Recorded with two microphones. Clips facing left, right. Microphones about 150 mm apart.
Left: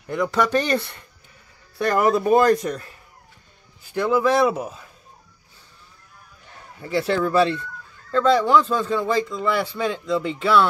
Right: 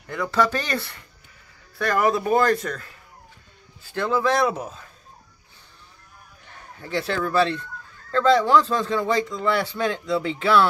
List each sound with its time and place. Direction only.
0.0 s a man's voice: 15° left (ahead or behind)
6.8 s speech: 5° left (ahead or behind)